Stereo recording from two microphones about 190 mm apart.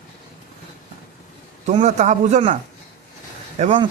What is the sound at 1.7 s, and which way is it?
Speech, 40° right (ahead or behind).